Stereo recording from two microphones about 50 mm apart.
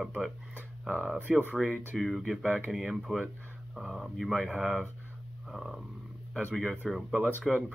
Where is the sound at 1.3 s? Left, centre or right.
Centre.